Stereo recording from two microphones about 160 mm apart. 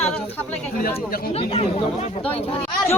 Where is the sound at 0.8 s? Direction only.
65° left (ahead or behind).